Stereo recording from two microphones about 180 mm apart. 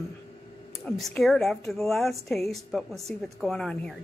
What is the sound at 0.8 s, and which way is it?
A woman's voice, centre (ahead or behind).